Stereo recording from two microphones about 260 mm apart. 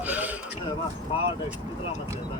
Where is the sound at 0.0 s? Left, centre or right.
Centre.